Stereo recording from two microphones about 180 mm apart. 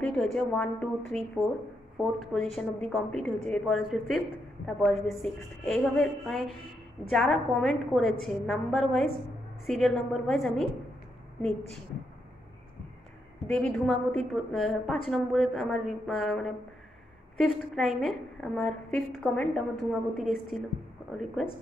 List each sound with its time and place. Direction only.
0.0 s a woman's voice: centre (ahead or behind)
13.5 s a woman's voice: 5° left (ahead or behind)